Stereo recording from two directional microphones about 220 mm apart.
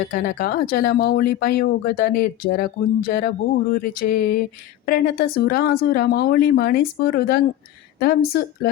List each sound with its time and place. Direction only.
0.1 s speech: 40° left (ahead or behind)